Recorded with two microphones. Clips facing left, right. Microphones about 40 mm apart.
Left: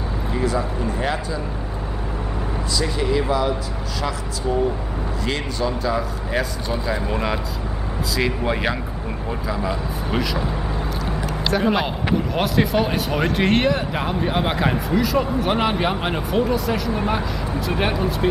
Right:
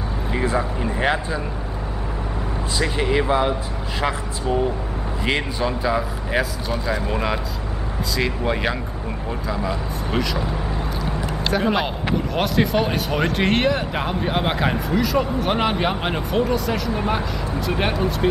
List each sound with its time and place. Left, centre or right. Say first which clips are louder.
0.3 s speech: right 1 dB; right
2.8 s speech: right 2 dB; right
5.6 s speech: right 1 dB; centre
7.1 s speech: even; centre
11.5 s speech: left 1 dB; centre